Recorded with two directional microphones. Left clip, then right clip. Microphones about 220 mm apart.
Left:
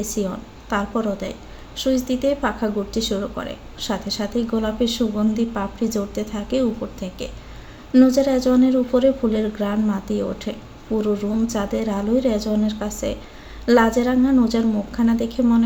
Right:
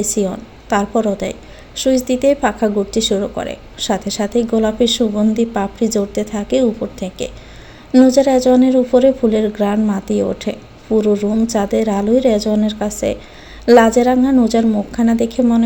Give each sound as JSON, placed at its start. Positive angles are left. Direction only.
{"t": 0.0, "sound": "a woman's voice", "side_deg": -30}